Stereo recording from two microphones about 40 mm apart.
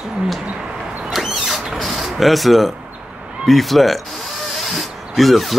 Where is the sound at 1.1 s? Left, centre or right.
Centre.